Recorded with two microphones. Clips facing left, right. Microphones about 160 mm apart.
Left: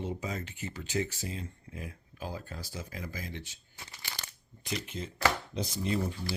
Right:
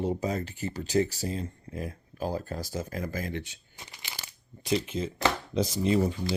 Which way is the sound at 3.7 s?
15° right (ahead or behind).